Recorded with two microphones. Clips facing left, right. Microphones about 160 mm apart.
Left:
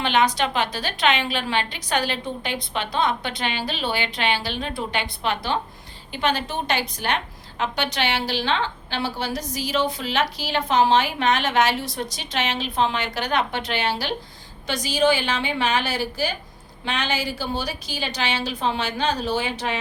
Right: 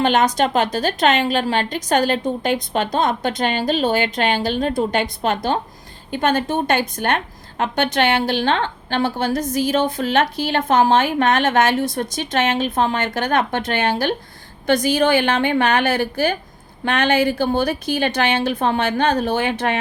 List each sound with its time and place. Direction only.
0.0 s a woman's voice: 45° right (ahead or behind)